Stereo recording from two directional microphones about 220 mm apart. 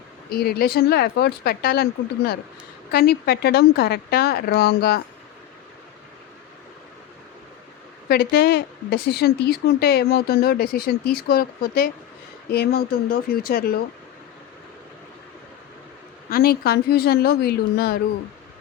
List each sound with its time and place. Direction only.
0.3 s speech: 45° left (ahead or behind)
8.0 s speech: 45° left (ahead or behind)
16.3 s speech: 45° left (ahead or behind)